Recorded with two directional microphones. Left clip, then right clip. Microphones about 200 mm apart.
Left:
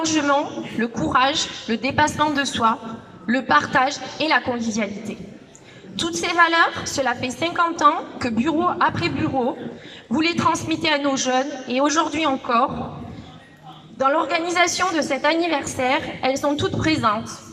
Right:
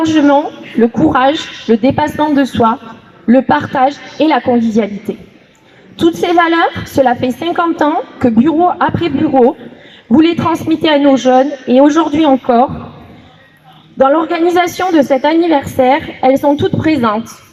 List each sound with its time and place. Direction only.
0.0 s a woman's voice: 45° right (ahead or behind)
6.0 s a woman's voice: 45° right (ahead or behind)
10.1 s a woman's voice: 45° right (ahead or behind)
14.0 s a woman's voice: 45° right (ahead or behind)